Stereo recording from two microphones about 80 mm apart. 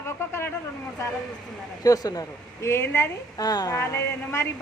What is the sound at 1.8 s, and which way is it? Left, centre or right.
Speech, left.